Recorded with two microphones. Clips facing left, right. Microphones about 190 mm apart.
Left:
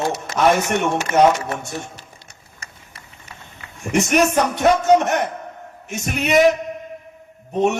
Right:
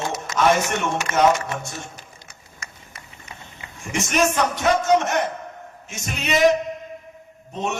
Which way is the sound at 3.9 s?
65° left (ahead or behind).